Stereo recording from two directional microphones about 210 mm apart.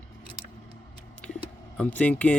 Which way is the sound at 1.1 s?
5° left (ahead or behind).